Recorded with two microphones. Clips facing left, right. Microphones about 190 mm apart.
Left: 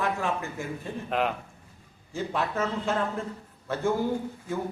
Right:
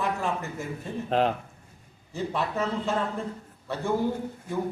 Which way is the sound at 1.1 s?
30° right (ahead or behind).